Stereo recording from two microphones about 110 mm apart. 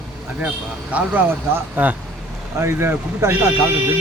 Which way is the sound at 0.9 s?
15° right (ahead or behind).